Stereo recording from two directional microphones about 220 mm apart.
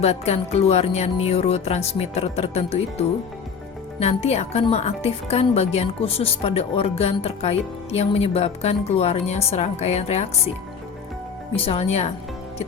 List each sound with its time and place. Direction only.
0.0 s speech: 30° left (ahead or behind)
11.5 s speech: 25° left (ahead or behind)